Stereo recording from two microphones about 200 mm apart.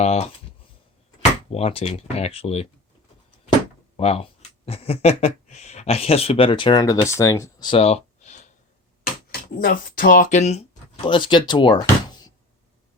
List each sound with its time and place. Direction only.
0.0 s speech: 30° left (ahead or behind)
1.5 s speech: 30° left (ahead or behind)
3.9 s speech: 30° left (ahead or behind)
9.6 s speech: 45° left (ahead or behind); by 12.3 s 25° left (ahead or behind)